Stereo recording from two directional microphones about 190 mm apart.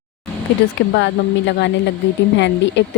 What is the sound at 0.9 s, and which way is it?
A woman's voice, 65° left (ahead or behind).